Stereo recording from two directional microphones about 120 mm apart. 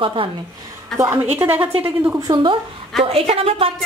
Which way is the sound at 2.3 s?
40° right (ahead or behind).